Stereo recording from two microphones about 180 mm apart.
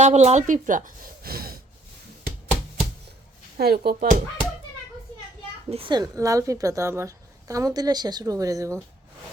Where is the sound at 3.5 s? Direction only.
60° right (ahead or behind).